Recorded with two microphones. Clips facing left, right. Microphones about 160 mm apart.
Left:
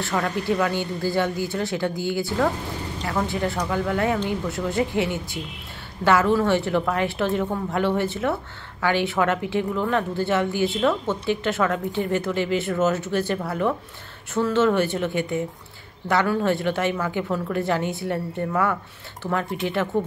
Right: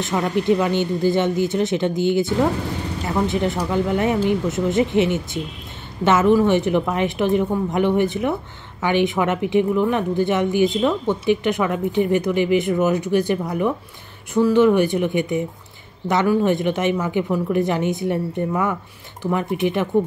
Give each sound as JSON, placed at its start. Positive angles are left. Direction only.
{"t": 0.0, "sound": "speech", "side_deg": -20}